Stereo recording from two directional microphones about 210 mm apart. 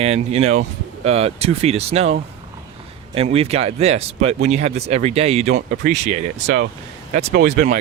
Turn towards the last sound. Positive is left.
turn(degrees=-45)  # may be behind; listen again after turning